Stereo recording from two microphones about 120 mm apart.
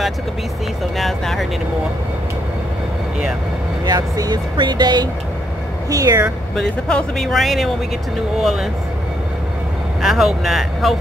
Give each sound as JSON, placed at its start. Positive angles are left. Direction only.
{"t": 0.9, "sound": "speech", "side_deg": 0}
{"t": 3.8, "sound": "speech", "side_deg": -35}
{"t": 6.5, "sound": "speech", "side_deg": 5}
{"t": 10.0, "sound": "speech", "side_deg": -5}